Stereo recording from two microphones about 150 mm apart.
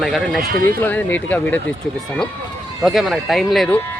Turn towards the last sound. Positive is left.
turn(degrees=0)  # may be behind; listen again after turning